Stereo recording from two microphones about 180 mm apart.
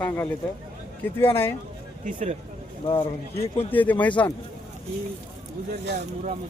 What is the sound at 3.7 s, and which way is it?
Speech, 10° left (ahead or behind).